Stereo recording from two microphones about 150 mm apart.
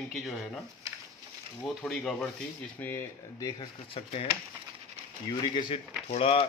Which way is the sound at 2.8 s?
15° left (ahead or behind).